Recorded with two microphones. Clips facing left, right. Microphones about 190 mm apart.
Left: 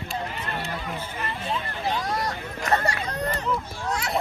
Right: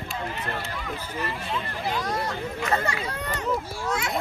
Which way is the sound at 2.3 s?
40° left (ahead or behind).